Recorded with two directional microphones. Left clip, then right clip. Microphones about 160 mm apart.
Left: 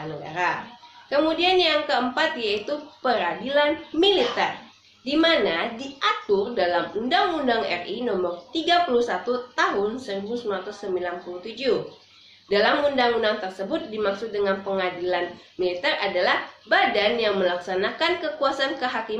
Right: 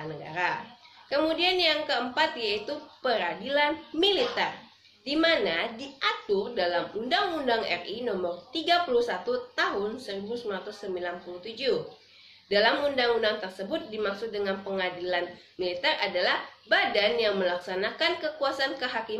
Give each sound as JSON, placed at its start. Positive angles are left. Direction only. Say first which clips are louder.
{"t": 0.3, "sound": "speech", "louder": "left 4 dB", "side_deg": -20}